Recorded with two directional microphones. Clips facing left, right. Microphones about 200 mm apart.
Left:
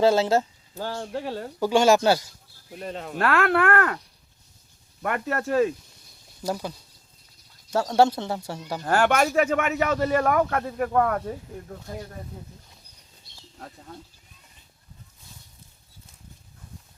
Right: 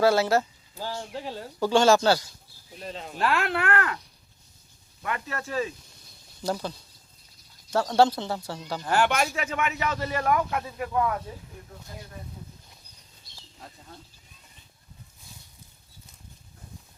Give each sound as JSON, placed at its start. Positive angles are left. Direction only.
{"t": 0.0, "sound": "speech", "side_deg": 20}
{"t": 0.8, "sound": "speech", "side_deg": 55}
{"t": 1.5, "sound": "speech", "side_deg": 15}
{"t": 2.6, "sound": "speech", "side_deg": 55}
{"t": 5.0, "sound": "speech", "side_deg": 50}
{"t": 6.5, "sound": "speech", "side_deg": 10}
{"t": 7.9, "sound": "speech", "side_deg": 20}
{"t": 8.8, "sound": "speech", "side_deg": 45}